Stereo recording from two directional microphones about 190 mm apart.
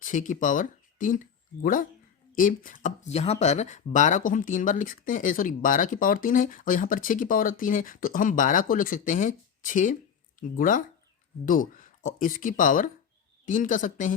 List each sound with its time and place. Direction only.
0.0 s speech: 40° left (ahead or behind)